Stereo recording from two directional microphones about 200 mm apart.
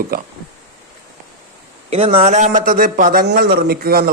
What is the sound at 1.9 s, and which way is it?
Speech, 30° right (ahead or behind).